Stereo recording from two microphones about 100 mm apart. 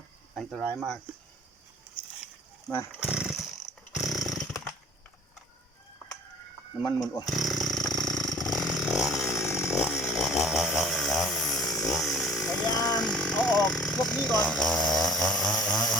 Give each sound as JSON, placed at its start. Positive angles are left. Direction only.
{"t": 3.0, "sound": "a sound", "side_deg": -5}
{"t": 3.9, "sound": "chainsaw", "side_deg": 0}
{"t": 6.7, "sound": "speech", "side_deg": 45}
{"t": 7.3, "sound": "chainsaw", "side_deg": 0}
{"t": 12.6, "sound": "speech", "side_deg": 40}
{"t": 13.0, "sound": "speech", "side_deg": 10}